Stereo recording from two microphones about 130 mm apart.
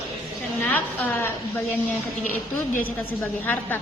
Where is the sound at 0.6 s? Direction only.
15° left (ahead or behind).